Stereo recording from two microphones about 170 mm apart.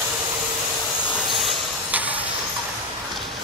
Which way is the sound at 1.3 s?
5° right (ahead or behind).